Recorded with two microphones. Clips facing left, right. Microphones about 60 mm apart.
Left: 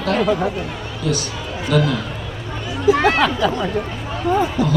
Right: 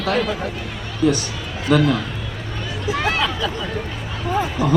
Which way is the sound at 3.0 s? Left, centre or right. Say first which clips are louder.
Left 5 dB; left.